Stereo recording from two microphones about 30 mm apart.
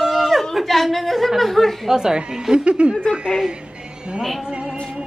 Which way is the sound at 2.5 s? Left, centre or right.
Right.